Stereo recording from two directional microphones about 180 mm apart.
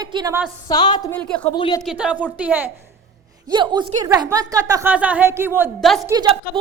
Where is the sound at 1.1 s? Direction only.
5° left (ahead or behind).